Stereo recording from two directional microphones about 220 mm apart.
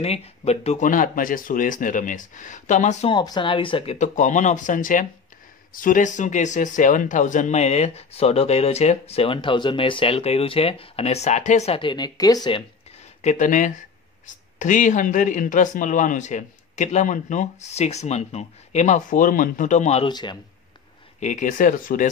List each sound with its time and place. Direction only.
0.0 s speech: 30° left (ahead or behind)
13.2 s speech: 35° left (ahead or behind)
21.2 s speech: 35° left (ahead or behind)